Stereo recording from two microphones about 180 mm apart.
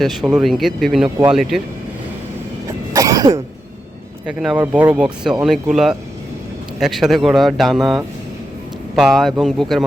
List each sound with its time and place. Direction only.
0.0 s speech: centre (ahead or behind)
2.6 s throat clearing: 20° right (ahead or behind)
4.3 s speech: 5° right (ahead or behind)
9.0 s speech: centre (ahead or behind)